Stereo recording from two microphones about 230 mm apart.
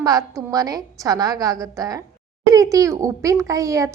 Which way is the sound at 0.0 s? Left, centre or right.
Centre.